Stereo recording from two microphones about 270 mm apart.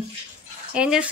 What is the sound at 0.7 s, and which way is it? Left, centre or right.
Speech, centre.